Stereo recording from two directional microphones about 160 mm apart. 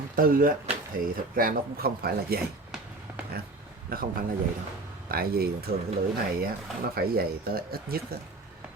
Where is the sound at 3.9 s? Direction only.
65° right (ahead or behind).